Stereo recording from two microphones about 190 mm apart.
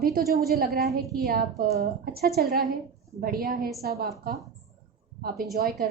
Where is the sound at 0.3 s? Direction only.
55° right (ahead or behind).